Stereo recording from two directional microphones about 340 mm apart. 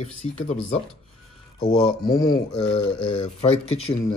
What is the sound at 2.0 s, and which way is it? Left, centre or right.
Speech, centre.